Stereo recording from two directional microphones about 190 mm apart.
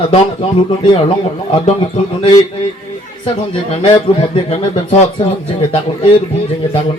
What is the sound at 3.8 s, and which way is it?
Speech, 30° left (ahead or behind).